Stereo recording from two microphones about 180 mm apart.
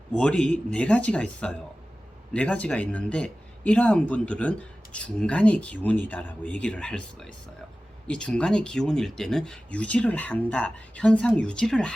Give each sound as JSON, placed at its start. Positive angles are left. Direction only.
{"t": 0.1, "sound": "speech", "side_deg": 5}